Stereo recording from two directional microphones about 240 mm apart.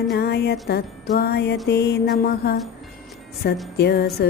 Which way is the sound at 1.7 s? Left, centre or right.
Left.